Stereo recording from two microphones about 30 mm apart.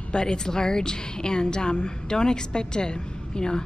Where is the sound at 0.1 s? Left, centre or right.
Left.